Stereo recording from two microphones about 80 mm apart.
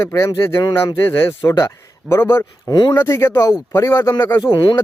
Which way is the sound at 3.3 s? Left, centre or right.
Left.